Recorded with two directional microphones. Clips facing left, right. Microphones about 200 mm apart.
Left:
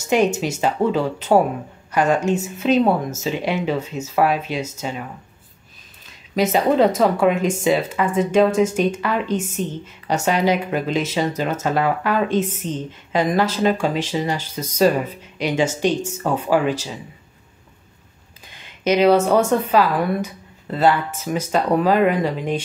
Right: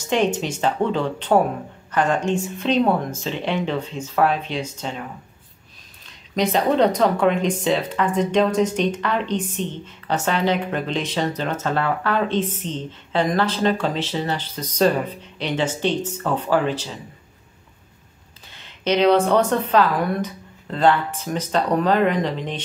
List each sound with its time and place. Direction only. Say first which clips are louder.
0.0 s speech: left 3 dB; 10° left (ahead or behind)
6.0 s speech: left 2 dB; 5° left (ahead or behind)
18.5 s speech: left 2 dB; 10° left (ahead or behind)